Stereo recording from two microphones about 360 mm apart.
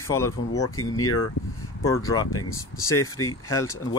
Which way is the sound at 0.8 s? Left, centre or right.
Left.